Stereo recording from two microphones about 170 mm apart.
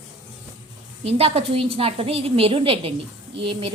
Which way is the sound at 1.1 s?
35° right (ahead or behind).